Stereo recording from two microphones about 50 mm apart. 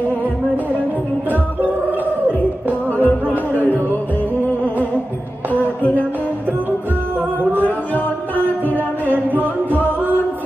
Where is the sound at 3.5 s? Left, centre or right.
Left.